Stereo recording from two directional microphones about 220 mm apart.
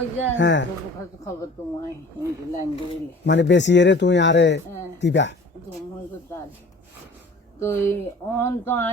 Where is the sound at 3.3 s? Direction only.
55° left (ahead or behind).